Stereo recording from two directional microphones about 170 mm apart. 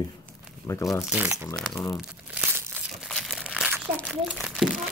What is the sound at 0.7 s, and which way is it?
Speech, 20° left (ahead or behind).